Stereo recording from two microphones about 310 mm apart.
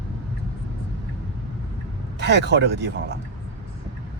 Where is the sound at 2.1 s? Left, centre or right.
Right.